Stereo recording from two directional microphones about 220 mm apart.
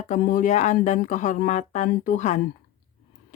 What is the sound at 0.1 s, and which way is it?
Speech, 40° left (ahead or behind).